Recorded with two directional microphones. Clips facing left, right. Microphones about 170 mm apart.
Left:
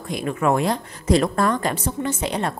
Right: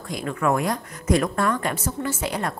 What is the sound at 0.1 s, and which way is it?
A woman's voice, 20° left (ahead or behind).